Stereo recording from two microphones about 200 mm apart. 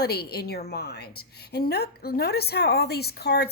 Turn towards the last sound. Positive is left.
turn(degrees=55)  # may be behind; listen again after turning